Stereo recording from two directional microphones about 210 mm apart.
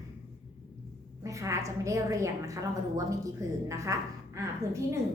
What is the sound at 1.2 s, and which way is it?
A woman's voice, 15° right (ahead or behind).